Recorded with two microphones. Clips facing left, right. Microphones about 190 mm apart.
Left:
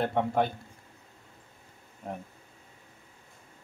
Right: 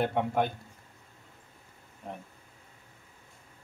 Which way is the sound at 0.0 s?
5° right (ahead or behind).